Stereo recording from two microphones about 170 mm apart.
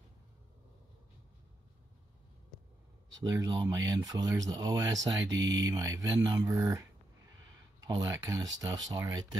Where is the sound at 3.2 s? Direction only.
20° right (ahead or behind).